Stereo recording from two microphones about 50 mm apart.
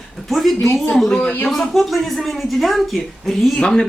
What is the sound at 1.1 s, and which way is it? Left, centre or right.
Speech, left.